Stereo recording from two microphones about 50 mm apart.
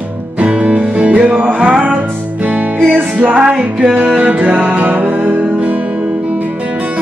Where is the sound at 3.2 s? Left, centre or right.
Right.